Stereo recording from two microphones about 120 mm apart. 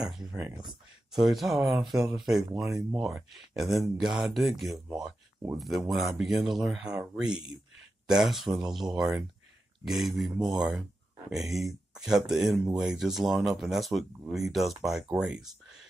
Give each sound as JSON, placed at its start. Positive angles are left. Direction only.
{"t": 0.1, "sound": "speech", "side_deg": -5}
{"t": 10.7, "sound": "a sound", "side_deg": -5}
{"t": 12.3, "sound": "speech", "side_deg": -5}